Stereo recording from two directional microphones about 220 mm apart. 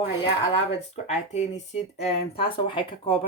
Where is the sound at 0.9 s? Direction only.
30° left (ahead or behind).